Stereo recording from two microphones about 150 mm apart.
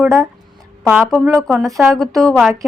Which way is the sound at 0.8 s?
10° right (ahead or behind).